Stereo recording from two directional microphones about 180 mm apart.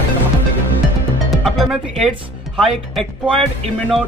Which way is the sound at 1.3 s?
Centre (ahead or behind).